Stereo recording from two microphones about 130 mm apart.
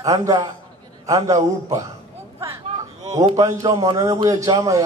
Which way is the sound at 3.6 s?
25° right (ahead or behind).